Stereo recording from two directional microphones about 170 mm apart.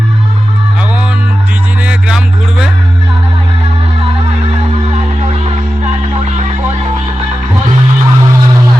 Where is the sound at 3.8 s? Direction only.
35° right (ahead or behind).